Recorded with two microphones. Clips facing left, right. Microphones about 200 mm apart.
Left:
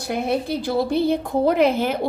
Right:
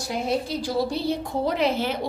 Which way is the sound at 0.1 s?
60° left (ahead or behind).